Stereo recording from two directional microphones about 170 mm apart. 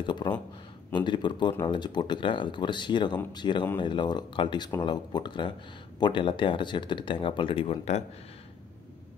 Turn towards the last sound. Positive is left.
turn(degrees=30)  # may be behind; listen again after turning